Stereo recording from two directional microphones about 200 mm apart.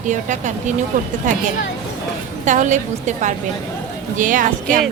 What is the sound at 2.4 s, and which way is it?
A woman's voice, 40° right (ahead or behind).